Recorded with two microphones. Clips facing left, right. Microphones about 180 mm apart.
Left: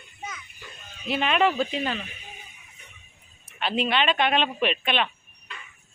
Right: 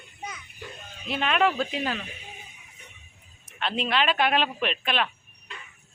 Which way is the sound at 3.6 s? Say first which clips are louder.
Left 2 dB; 5° left (ahead or behind).